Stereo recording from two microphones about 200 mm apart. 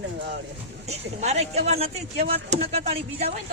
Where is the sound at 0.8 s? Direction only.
35° right (ahead or behind).